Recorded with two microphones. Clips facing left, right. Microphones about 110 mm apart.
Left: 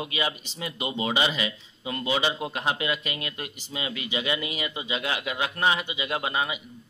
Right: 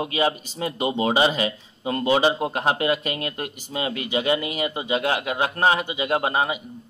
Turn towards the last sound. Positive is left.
turn(degrees=-45)  # may be behind; listen again after turning